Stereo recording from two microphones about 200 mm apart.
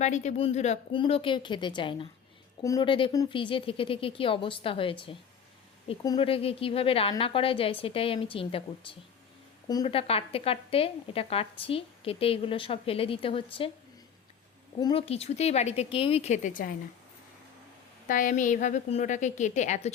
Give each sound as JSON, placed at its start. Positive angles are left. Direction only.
{"t": 0.0, "sound": "a woman's voice", "side_deg": 35}
{"t": 14.8, "sound": "speech", "side_deg": 25}
{"t": 18.1, "sound": "speech", "side_deg": 40}